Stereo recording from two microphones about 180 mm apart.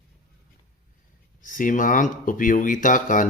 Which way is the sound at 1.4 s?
50° left (ahead or behind).